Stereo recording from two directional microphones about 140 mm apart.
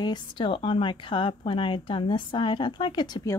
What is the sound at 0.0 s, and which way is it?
A woman's voice, 30° left (ahead or behind).